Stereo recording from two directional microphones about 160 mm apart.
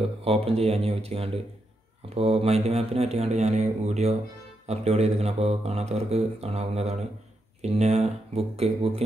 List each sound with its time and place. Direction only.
0.2 s speech: 40° right (ahead or behind)